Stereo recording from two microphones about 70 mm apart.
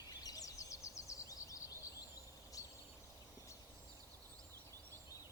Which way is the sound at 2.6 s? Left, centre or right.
Left.